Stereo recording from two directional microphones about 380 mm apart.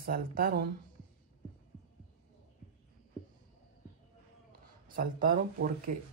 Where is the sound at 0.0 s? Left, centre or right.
Right.